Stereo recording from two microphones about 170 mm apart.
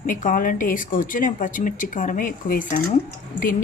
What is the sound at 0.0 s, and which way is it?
A woman's voice, 50° left (ahead or behind).